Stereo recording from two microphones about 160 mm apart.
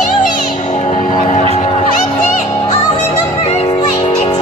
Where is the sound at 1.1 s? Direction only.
50° left (ahead or behind).